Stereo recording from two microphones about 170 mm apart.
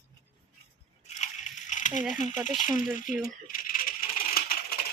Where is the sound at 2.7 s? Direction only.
Centre (ahead or behind).